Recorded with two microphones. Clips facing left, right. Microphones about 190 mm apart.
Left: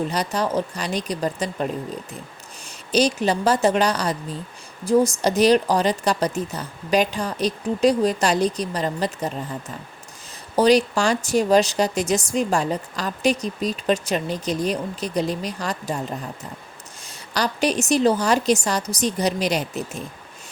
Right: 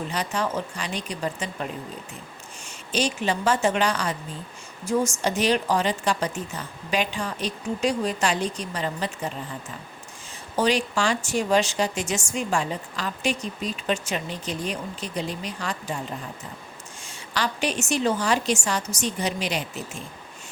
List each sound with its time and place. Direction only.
0.1 s speech: 40° left (ahead or behind)
10.5 s speech: 35° left (ahead or behind)
17.1 s speech: 40° left (ahead or behind)